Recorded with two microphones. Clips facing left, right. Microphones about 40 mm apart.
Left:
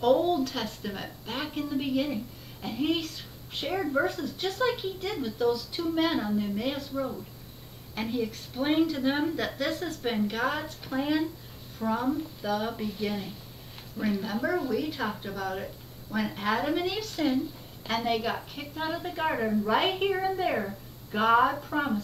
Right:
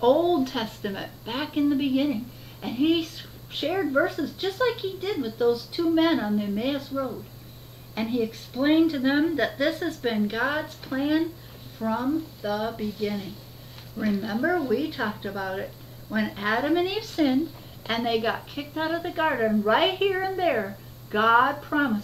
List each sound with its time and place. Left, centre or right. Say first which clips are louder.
0.0 s a woman's voice: right 3 dB; right
3.7 s a woman's voice: right 3 dB; centre
7.9 s a woman's voice: right 4 dB; centre